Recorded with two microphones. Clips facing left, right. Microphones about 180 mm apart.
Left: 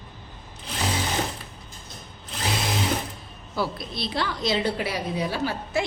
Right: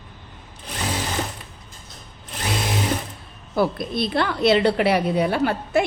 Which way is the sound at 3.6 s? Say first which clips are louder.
Right 7 dB; 55° right (ahead or behind).